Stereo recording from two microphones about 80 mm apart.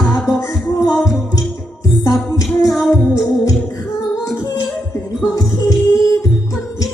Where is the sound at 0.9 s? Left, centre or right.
Left.